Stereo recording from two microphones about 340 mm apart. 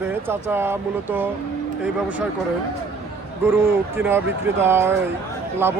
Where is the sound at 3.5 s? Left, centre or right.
Centre.